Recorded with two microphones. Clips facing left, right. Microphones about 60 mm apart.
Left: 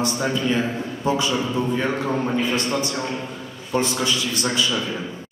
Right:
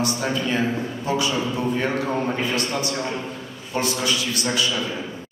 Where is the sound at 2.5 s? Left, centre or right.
Left.